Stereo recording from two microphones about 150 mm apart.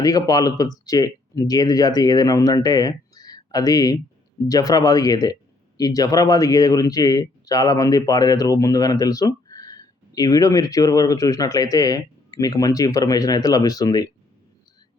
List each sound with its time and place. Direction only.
0.0 s speech: 25° left (ahead or behind)